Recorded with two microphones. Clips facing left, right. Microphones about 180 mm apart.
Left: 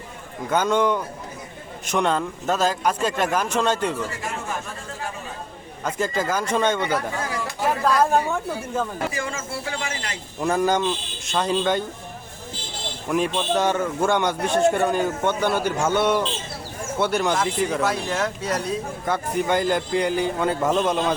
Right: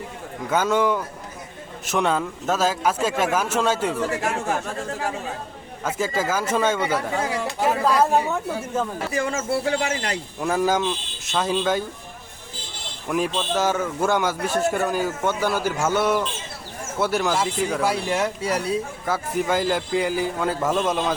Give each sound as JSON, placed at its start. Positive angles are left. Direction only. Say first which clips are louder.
{"t": 0.5, "sound": "speech", "louder": "even", "side_deg": -5}
{"t": 4.1, "sound": "speech", "louder": "right 6 dB", "side_deg": -70}
{"t": 5.8, "sound": "speech", "louder": "even", "side_deg": -5}
{"t": 9.1, "sound": "speech", "louder": "right 6 dB", "side_deg": -45}
{"t": 10.4, "sound": "speech", "louder": "left 1 dB", "side_deg": -5}
{"t": 13.1, "sound": "speech", "louder": "left 1 dB", "side_deg": 0}